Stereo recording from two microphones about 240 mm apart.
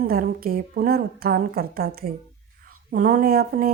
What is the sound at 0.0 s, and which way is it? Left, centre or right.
Speech, right.